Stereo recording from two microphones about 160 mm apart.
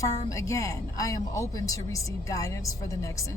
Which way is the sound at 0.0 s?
20° left (ahead or behind).